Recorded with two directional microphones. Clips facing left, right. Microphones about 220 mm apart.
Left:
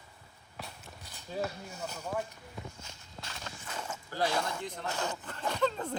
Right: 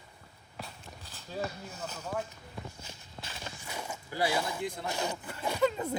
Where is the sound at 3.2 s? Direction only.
10° right (ahead or behind).